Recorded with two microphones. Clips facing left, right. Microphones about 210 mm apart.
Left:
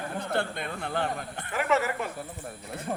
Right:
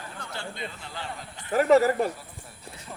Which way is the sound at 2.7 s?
55° left (ahead or behind).